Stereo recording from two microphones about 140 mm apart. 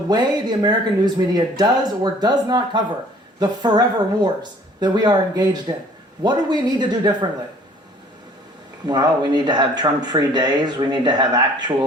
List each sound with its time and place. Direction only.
0.1 s speech: 30° right (ahead or behind)
8.9 s speech: 30° right (ahead or behind)